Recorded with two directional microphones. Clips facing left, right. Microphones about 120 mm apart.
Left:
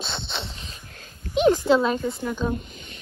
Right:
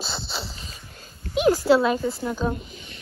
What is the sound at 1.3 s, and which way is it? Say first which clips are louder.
A woman's voice: even; 5° right (ahead or behind).